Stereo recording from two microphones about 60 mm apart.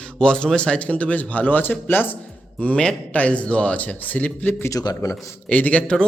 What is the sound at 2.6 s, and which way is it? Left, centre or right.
Speech, centre.